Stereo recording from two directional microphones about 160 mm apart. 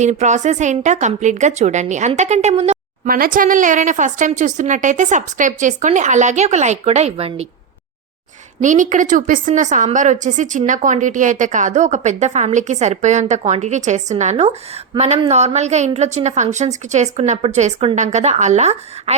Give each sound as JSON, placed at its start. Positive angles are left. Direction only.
{"t": 0.0, "sound": "a woman's voice", "side_deg": -45}
{"t": 3.1, "sound": "a woman's voice", "side_deg": -60}
{"t": 8.6, "sound": "a woman's voice", "side_deg": -50}